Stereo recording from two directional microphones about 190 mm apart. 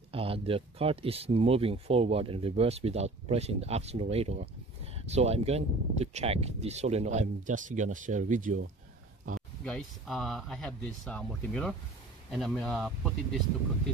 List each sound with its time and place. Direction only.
0.1 s speech: 30° right (ahead or behind)
9.7 s speech: centre (ahead or behind)